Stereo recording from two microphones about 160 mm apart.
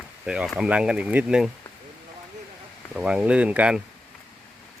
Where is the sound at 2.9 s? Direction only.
5° right (ahead or behind).